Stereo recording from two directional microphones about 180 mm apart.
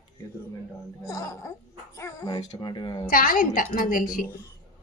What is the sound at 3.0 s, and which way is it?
A woman's voice, 50° left (ahead or behind).